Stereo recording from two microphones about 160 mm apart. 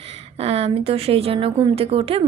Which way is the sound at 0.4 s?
40° right (ahead or behind).